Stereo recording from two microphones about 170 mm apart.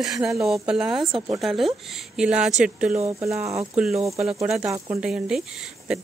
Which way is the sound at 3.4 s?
40° right (ahead or behind).